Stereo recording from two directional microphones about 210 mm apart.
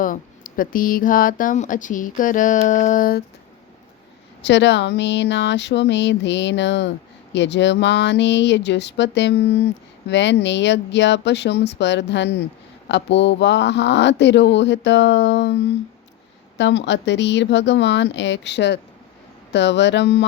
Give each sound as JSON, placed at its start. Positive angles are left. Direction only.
{"t": 0.0, "sound": "speech", "side_deg": 40}
{"t": 4.4, "sound": "speech", "side_deg": 55}
{"t": 16.6, "sound": "speech", "side_deg": 55}